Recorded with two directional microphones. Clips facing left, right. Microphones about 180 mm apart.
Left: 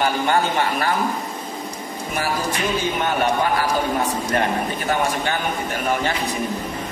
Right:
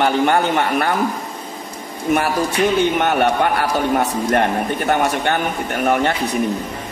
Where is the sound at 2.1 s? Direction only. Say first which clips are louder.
Right 6 dB; 65° right (ahead or behind).